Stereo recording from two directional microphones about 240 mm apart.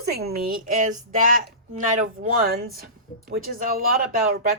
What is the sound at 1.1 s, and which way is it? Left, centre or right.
Speech, right.